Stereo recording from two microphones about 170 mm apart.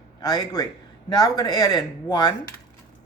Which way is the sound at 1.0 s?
20° left (ahead or behind).